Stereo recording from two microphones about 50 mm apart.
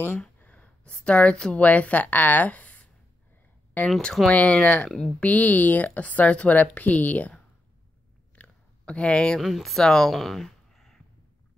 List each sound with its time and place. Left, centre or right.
0.4 s gasp: left
1.0 s a woman's voice: left
1.6 s a woman's voice: left
4.8 s speech: centre
5.2 s speech: left
8.4 s a sound: left
9.4 s speech: centre